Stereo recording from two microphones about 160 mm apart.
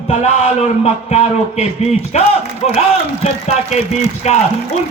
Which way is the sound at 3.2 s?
45° left (ahead or behind).